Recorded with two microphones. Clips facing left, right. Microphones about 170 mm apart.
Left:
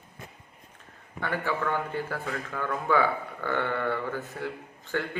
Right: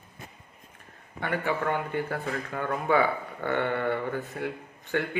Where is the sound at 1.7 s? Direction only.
20° right (ahead or behind).